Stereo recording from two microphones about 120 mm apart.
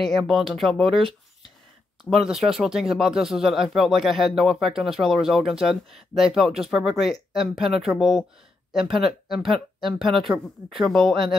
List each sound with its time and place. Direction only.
0.0 s speech: centre (ahead or behind)
2.0 s speech: centre (ahead or behind)